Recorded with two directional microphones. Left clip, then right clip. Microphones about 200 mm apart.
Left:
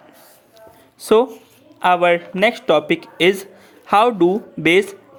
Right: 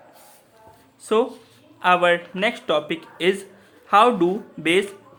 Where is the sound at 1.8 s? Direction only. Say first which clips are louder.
Left 3 dB; 25° left (ahead or behind).